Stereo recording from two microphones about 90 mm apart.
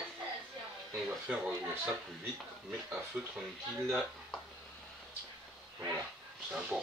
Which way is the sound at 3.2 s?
10° right (ahead or behind).